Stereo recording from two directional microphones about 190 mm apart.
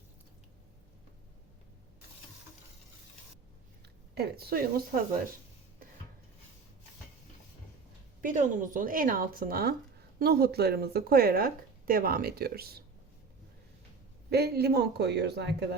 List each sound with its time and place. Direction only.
4.1 s speech: 55° right (ahead or behind)
8.2 s speech: 45° right (ahead or behind)
14.3 s a man's voice: 60° right (ahead or behind)